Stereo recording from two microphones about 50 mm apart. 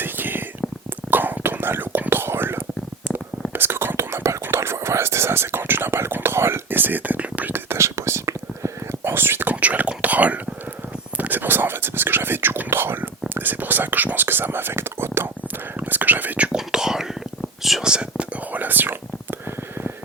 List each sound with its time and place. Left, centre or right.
0.0 s whispering: right
7.5 s whispering: right
9.0 s whispering: right
9.5 s whispering: right
15.8 s whispering: right
16.6 s whispering: centre
17.8 s whispering: centre
18.5 s whispering: right